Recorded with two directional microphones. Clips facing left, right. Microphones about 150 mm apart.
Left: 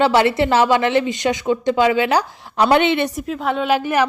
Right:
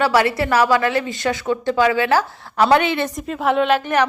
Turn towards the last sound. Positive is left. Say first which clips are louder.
# right 1 dB
turn(degrees=10)  # may be behind; listen again after turning